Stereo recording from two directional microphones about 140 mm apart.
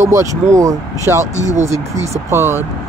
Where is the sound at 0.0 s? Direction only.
20° right (ahead or behind).